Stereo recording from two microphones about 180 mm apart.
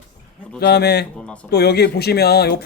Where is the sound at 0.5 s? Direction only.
65° left (ahead or behind).